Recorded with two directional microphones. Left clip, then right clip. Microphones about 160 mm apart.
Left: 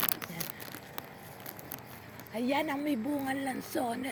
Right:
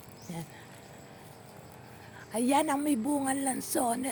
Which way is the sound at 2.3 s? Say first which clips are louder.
Right 4 dB; 65° right (ahead or behind).